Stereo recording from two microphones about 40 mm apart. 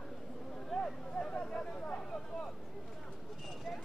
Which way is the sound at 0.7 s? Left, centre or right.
Left.